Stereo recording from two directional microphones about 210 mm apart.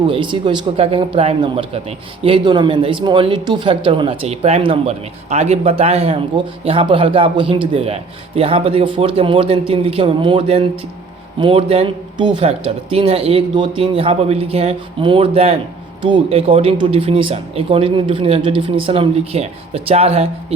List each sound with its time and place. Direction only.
0.1 s speech: 25° right (ahead or behind)